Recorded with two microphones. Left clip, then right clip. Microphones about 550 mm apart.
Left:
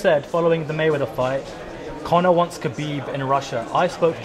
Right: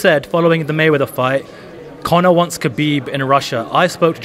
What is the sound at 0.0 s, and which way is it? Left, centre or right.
Speech, right.